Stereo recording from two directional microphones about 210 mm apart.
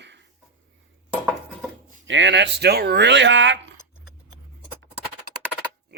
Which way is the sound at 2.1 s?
60° right (ahead or behind).